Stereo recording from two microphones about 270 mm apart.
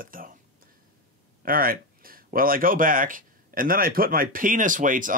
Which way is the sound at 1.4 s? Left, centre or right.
Right.